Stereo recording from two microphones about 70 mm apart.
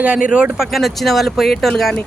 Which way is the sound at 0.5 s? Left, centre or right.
Centre.